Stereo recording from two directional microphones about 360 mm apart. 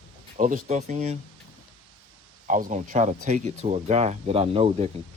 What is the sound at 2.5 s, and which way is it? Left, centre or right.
Speech, right.